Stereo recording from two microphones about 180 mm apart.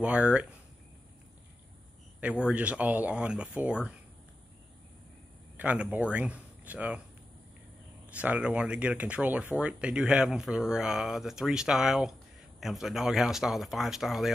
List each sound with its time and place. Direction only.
0.0 s speech: 5° right (ahead or behind)
2.4 s speech: 5° right (ahead or behind)
5.6 s speech: 10° right (ahead or behind)
8.1 s speech: 5° right (ahead or behind)